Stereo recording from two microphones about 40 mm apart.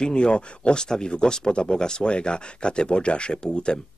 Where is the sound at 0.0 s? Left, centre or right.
Left.